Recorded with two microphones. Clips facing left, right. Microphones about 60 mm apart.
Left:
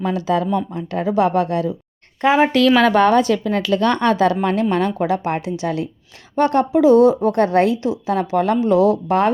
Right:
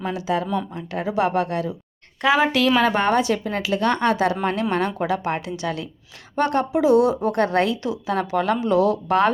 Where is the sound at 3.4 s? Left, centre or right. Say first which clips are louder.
Left 5 dB; left.